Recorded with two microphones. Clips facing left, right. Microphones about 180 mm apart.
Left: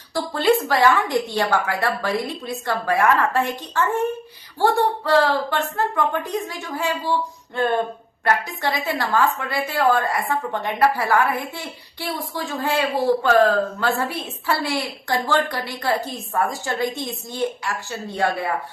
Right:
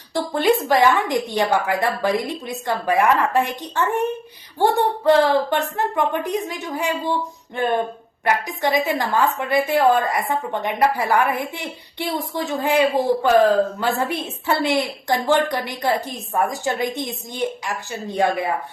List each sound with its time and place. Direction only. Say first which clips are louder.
0.1 s a woman's voice: even; 20° right (ahead or behind)